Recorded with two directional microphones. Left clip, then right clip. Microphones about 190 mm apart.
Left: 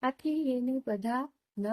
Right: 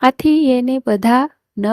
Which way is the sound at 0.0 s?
60° right (ahead or behind).